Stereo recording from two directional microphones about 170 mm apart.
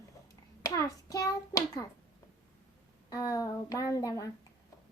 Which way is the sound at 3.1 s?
20° left (ahead or behind).